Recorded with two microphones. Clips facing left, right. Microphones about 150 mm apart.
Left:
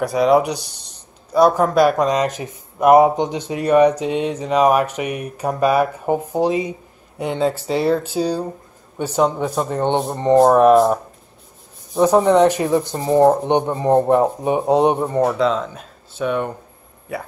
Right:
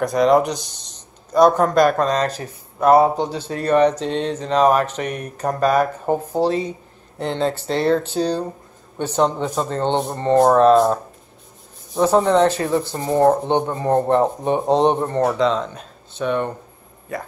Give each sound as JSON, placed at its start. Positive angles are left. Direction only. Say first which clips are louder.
{"t": 0.0, "sound": "speech", "louder": "even", "side_deg": 5}